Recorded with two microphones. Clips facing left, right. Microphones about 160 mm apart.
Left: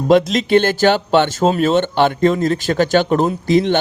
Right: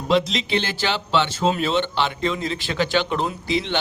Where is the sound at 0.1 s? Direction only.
50° left (ahead or behind).